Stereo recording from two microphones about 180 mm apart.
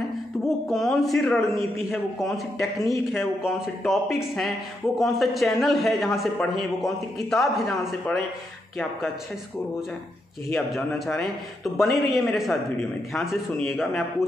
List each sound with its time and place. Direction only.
0.7 s a man's voice: centre (ahead or behind)
2.6 s speech: 20° left (ahead or behind)
3.4 s a man's voice: centre (ahead or behind)
10.5 s a man's voice: centre (ahead or behind)